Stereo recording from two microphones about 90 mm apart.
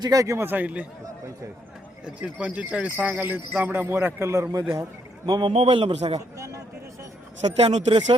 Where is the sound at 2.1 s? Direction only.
15° right (ahead or behind); by 4.6 s 35° right (ahead or behind).